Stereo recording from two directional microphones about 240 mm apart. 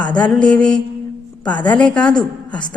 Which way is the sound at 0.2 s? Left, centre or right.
Centre.